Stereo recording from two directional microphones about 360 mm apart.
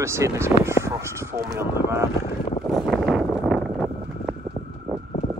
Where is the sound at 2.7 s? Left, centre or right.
Centre.